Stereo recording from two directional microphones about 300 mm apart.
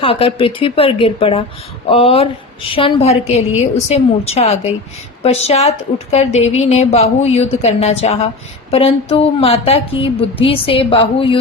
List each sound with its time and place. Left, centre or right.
0.0 s a woman's voice: centre